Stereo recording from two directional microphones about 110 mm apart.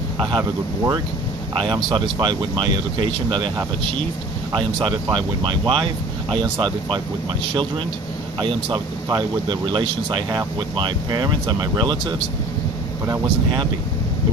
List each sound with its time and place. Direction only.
0.2 s speech: 45° right (ahead or behind)
1.5 s speech: 45° right (ahead or behind)
4.5 s speech: 45° right (ahead or behind)
8.4 s speech: 45° right (ahead or behind)
13.2 s speech: 45° right (ahead or behind)